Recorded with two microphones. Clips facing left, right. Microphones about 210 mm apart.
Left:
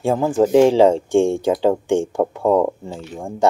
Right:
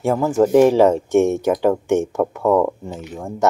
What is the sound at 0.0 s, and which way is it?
Speech, 15° left (ahead or behind).